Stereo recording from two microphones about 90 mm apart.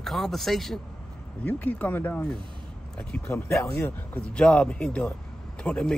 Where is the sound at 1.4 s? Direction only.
20° left (ahead or behind).